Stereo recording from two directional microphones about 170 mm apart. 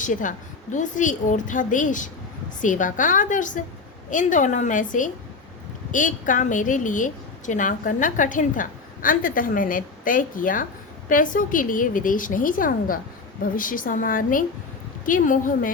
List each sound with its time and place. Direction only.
0.0 s a woman's voice: 50° left (ahead or behind)